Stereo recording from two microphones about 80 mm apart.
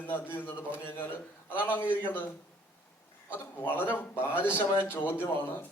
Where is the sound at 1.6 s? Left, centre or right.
Left.